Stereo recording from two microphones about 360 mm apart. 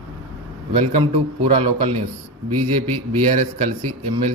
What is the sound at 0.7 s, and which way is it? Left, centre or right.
A man's voice, centre.